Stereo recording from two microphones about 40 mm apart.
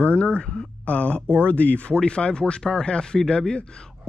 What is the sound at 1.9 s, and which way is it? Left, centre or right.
Speech, left.